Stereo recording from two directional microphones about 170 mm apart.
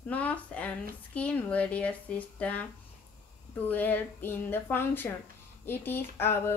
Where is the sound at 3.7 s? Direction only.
10° left (ahead or behind).